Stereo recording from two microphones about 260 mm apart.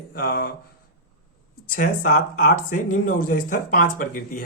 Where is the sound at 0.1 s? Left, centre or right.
Left.